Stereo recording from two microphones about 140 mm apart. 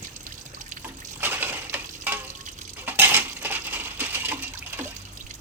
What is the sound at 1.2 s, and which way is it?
Crushing, 15° right (ahead or behind).